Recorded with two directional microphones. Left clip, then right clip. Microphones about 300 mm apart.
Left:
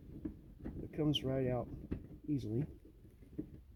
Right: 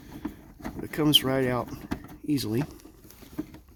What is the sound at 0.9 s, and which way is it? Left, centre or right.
Speech, right.